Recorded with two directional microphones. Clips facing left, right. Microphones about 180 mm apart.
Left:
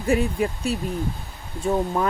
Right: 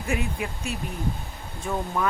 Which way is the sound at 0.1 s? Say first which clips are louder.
Left 8 dB; 35° left (ahead or behind).